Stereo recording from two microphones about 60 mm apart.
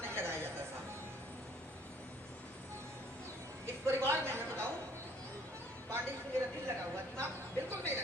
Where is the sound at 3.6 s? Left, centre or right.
Right.